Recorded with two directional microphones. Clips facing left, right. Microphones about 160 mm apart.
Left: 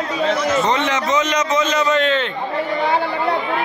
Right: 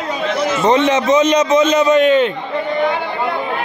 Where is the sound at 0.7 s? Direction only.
20° right (ahead or behind).